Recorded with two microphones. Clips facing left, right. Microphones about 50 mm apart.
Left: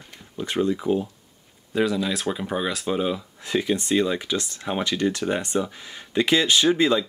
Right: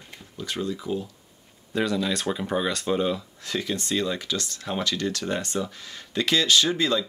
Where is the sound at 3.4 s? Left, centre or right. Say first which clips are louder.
Left 5 dB; left.